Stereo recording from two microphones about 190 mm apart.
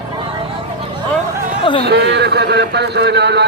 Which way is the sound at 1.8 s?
60° right (ahead or behind).